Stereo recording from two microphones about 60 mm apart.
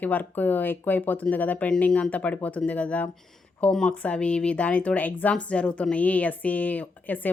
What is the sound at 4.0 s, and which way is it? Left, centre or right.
Speech, left.